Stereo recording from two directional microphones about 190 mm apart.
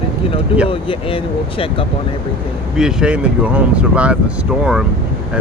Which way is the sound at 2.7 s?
5° right (ahead or behind).